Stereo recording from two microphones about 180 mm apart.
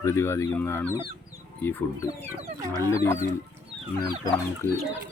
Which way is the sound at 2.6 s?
20° right (ahead or behind).